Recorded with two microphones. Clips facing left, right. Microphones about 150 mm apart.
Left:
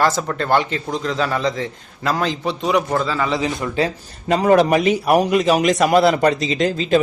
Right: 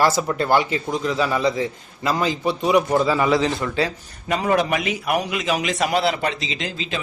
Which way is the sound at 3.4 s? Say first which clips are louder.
Left 1 dB; 20° left (ahead or behind).